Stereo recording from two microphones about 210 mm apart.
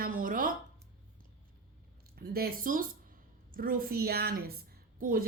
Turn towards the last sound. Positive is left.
turn(degrees=-40)  # may be behind; listen again after turning